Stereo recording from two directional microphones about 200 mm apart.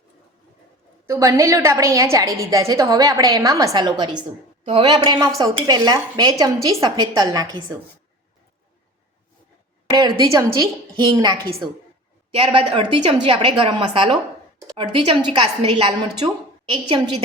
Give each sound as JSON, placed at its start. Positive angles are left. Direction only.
{"t": 1.0, "sound": "a woman's voice", "side_deg": -15}
{"t": 9.9, "sound": "speech", "side_deg": -20}